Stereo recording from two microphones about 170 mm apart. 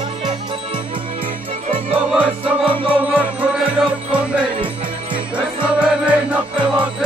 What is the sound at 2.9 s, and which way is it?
Music, 10° right (ahead or behind).